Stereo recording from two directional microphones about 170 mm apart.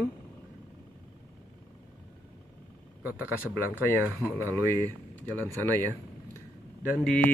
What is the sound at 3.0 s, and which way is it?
Speech, 10° right (ahead or behind).